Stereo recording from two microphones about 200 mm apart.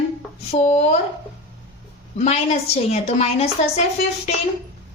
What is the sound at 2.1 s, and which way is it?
A woman's voice, 35° left (ahead or behind).